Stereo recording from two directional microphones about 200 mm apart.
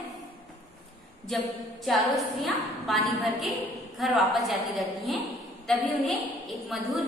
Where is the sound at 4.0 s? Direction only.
Centre (ahead or behind).